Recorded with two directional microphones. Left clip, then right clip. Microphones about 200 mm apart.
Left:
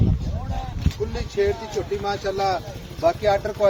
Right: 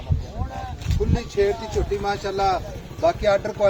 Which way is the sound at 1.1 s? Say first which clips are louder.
Right 1 dB; 30° right (ahead or behind).